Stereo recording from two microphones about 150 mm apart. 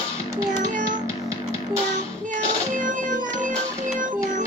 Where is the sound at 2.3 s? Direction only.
60° right (ahead or behind).